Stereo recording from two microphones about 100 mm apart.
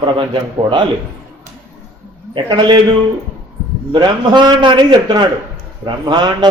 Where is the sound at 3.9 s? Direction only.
50° right (ahead or behind).